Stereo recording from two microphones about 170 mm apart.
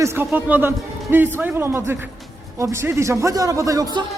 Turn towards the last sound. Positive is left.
turn(degrees=-20)  # may be behind; listen again after turning